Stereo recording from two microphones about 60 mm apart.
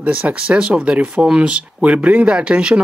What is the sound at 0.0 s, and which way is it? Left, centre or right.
Speech, right.